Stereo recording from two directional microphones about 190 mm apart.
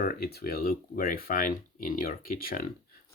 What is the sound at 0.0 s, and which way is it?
Speech, 50° left (ahead or behind).